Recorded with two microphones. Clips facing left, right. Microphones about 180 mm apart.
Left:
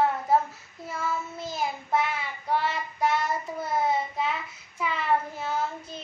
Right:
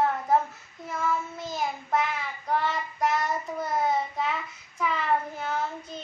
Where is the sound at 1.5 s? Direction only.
5° left (ahead or behind).